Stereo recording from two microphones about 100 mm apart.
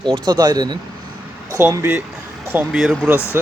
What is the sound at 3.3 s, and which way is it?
Speech, 25° right (ahead or behind).